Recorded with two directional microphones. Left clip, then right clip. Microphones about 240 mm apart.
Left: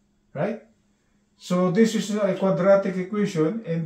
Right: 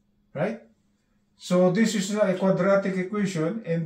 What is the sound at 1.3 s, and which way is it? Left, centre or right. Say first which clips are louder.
Speech: even; centre.